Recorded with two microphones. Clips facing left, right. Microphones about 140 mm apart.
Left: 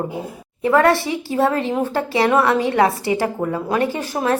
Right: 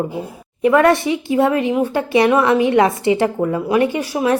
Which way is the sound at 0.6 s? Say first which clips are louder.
Right 2 dB; 20° right (ahead or behind).